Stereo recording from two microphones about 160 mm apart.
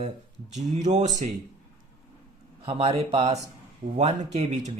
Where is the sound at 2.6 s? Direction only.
35° right (ahead or behind).